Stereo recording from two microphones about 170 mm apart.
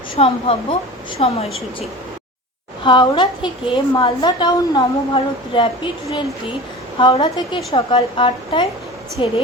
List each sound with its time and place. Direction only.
0.2 s a woman's voice: 35° left (ahead or behind)
2.8 s a woman's voice: 30° left (ahead or behind)